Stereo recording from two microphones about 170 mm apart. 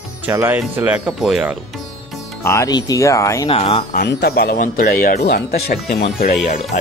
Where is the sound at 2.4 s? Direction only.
15° left (ahead or behind).